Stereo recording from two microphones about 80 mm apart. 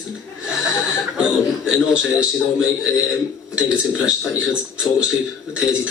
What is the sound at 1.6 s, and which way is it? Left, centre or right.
Speech, centre.